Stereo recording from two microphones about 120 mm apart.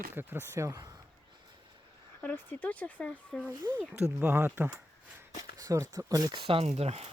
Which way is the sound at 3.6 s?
15° right (ahead or behind).